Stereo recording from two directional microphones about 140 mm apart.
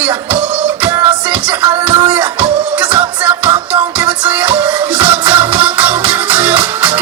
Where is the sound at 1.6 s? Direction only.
30° right (ahead or behind).